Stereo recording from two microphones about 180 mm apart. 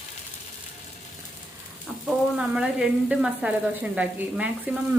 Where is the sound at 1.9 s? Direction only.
Centre (ahead or behind).